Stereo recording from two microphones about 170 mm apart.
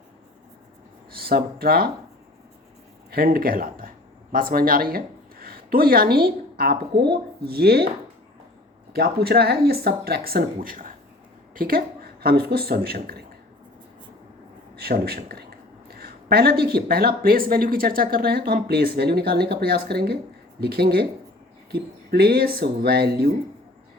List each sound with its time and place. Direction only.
1.1 s speech: 65° right (ahead or behind)
3.1 s speech: 65° right (ahead or behind)
8.9 s speech: 70° right (ahead or behind)
14.8 s speech: 65° right (ahead or behind)